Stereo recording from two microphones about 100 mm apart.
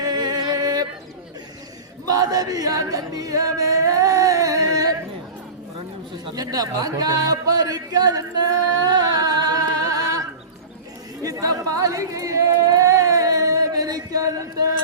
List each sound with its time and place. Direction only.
0.0 s music: 40° right (ahead or behind)
2.0 s chant: 40° right (ahead or behind)
6.3 s speech: 40° right (ahead or behind)
11.2 s chatter: 35° right (ahead or behind)